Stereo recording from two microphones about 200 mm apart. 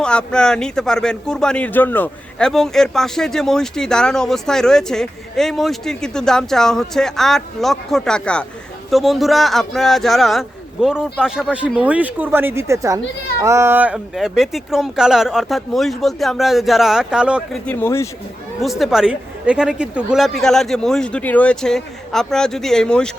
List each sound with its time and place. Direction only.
0.0 s speech: 5° left (ahead or behind)
17.7 s speech: 10° left (ahead or behind)
18.6 s speech: centre (ahead or behind)